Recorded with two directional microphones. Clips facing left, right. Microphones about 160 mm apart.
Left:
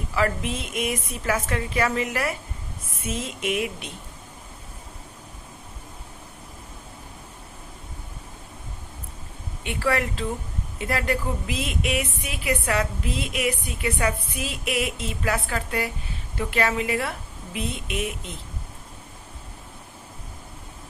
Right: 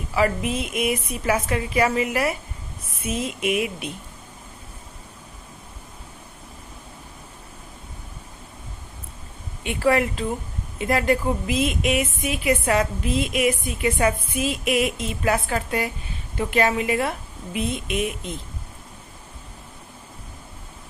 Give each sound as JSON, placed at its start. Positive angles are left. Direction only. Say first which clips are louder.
{"t": 0.1, "sound": "a woman's voice", "louder": "right 3 dB", "side_deg": -10}
{"t": 9.6, "sound": "a woman's voice", "louder": "right 5 dB", "side_deg": -20}